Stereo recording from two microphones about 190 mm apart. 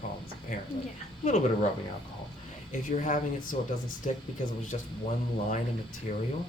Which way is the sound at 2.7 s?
45° left (ahead or behind).